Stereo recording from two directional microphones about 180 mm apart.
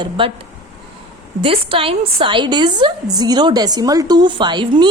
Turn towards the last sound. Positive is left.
turn(degrees=-25)  # may be behind; listen again after turning